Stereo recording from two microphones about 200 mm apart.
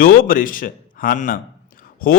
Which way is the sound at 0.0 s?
45° left (ahead or behind).